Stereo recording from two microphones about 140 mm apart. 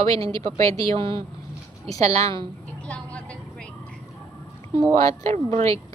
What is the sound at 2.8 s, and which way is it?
Vehicle, 10° left (ahead or behind).